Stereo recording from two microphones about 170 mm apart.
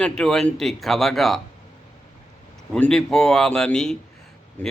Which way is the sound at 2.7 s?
5° left (ahead or behind).